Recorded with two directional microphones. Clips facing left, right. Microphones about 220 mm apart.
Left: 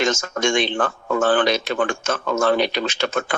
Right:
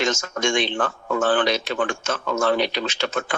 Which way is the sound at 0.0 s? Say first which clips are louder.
Left 2 dB; 45° left (ahead or behind).